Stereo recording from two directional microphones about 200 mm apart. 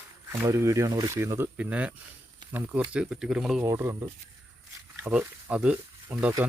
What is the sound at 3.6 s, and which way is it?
Speech, 15° right (ahead or behind).